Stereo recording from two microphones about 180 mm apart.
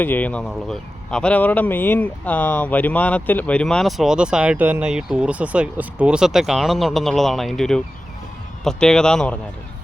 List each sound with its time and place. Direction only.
0.0 s speech: 10° left (ahead or behind)